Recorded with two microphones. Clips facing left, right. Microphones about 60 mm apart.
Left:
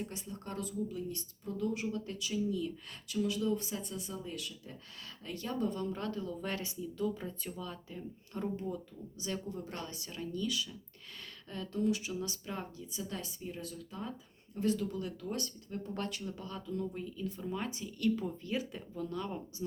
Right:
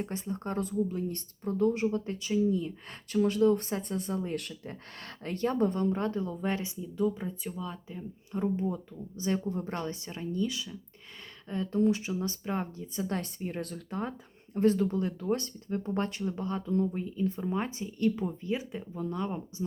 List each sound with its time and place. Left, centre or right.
0.0 s speech: right; by 8.4 s centre
8.5 s speech: right